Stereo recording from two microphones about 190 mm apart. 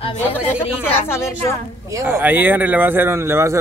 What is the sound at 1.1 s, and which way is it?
Speech, 15° left (ahead or behind).